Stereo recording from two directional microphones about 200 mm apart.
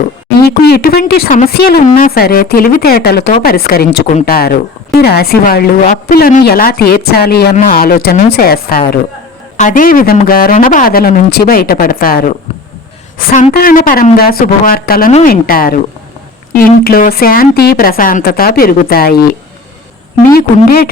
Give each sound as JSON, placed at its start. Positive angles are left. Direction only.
{"t": 0.3, "sound": "speech", "side_deg": 50}